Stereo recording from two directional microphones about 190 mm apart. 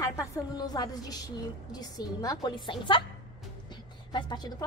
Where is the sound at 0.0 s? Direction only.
15° left (ahead or behind).